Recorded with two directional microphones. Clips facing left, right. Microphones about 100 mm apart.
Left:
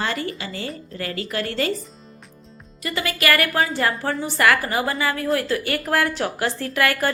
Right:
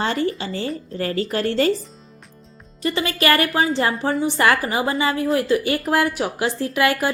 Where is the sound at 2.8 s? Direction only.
25° right (ahead or behind).